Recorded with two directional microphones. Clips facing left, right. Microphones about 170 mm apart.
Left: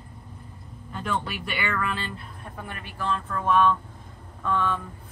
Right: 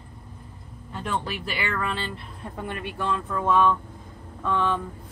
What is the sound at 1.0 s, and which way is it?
Speech, 30° right (ahead or behind).